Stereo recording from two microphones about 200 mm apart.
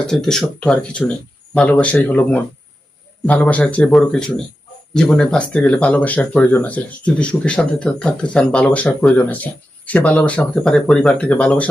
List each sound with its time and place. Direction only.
0.0 s speech: 5° left (ahead or behind)